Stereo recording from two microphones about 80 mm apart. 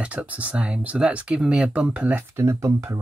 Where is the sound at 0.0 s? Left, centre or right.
Centre.